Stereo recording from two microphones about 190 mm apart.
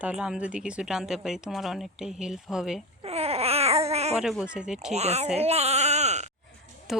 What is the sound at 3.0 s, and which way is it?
Babbling, 30° right (ahead or behind).